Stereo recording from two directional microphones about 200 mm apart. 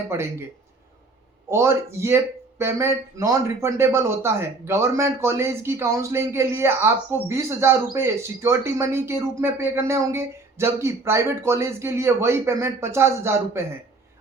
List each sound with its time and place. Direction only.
0.1 s speech: 10° right (ahead or behind)
1.5 s speech: 10° right (ahead or behind)